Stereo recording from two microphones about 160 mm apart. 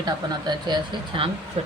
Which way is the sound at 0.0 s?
25° right (ahead or behind).